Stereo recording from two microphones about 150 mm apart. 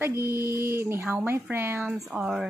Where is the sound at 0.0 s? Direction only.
20° right (ahead or behind).